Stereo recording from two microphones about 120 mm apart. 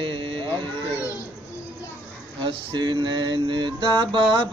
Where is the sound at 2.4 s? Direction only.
40° right (ahead or behind).